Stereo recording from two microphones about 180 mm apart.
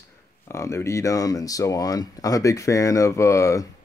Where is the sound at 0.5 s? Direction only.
15° left (ahead or behind).